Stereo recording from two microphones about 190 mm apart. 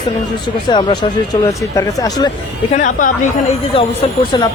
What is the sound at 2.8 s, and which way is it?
Speech, 40° left (ahead or behind).